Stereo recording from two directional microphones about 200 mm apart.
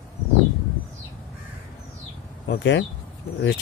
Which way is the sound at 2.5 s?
65° left (ahead or behind).